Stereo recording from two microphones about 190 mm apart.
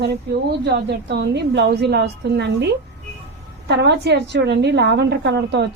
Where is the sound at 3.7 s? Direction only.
65° right (ahead or behind).